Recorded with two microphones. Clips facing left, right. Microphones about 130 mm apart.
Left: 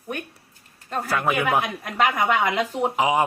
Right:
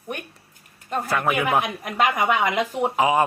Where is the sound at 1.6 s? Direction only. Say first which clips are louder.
Right 1 dB; 20° right (ahead or behind).